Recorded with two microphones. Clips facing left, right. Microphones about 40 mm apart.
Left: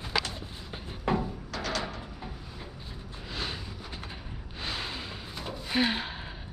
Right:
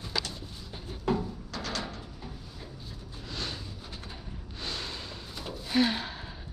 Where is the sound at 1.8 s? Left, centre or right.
Left.